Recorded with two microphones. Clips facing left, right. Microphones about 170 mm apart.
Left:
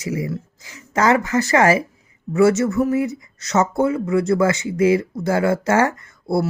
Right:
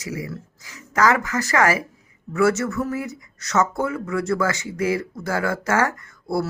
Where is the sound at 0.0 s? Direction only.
25° left (ahead or behind).